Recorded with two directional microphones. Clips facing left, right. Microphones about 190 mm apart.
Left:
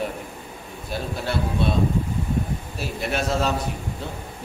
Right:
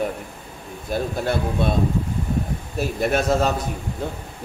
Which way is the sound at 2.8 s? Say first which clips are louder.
Right 6 dB; 45° right (ahead or behind).